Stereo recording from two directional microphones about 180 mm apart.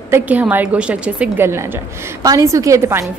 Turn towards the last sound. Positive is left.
turn(degrees=-15)  # may be behind; listen again after turning